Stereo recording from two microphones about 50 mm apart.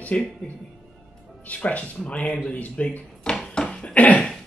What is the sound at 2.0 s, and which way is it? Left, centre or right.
Speech, left.